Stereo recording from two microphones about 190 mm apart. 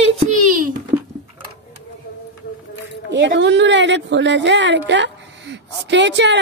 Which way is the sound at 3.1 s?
75° right (ahead or behind).